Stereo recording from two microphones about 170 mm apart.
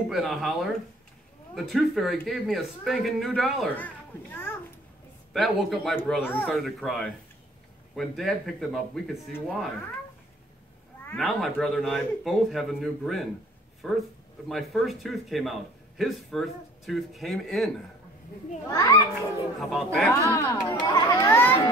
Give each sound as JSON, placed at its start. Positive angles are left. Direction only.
{"t": 0.1, "sound": "a man's voice", "side_deg": 0}
{"t": 5.3, "sound": "a man's voice", "side_deg": 0}
{"t": 11.1, "sound": "a man's voice", "side_deg": 0}
{"t": 18.7, "sound": "a child's voice", "side_deg": 20}
{"t": 19.7, "sound": "a man's voice", "side_deg": 0}
{"t": 20.2, "sound": "a child's voice", "side_deg": 20}